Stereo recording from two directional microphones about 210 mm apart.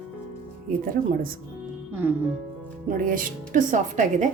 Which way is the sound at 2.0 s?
5° right (ahead or behind).